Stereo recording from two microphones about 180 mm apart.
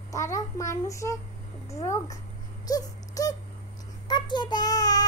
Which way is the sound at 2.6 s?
20° left (ahead or behind).